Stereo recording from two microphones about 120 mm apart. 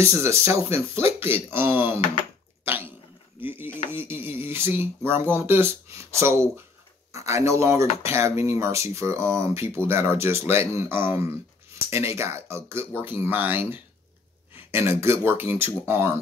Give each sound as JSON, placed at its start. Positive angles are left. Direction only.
{"t": 0.0, "sound": "speech", "side_deg": -25}
{"t": 2.6, "sound": "cough", "side_deg": -20}
{"t": 3.4, "sound": "a sound", "side_deg": -20}
{"t": 3.9, "sound": "speech", "side_deg": -20}